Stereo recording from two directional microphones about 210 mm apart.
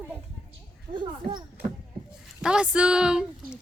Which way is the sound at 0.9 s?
25° right (ahead or behind).